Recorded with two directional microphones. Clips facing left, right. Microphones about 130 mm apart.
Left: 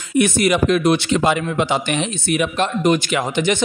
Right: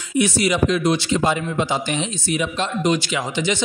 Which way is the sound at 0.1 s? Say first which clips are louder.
Left 3 dB; 55° left (ahead or behind).